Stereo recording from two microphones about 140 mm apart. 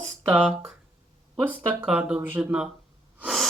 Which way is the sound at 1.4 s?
10° right (ahead or behind).